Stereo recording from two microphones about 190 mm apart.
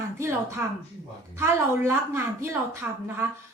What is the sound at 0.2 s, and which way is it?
A woman's voice, 15° right (ahead or behind).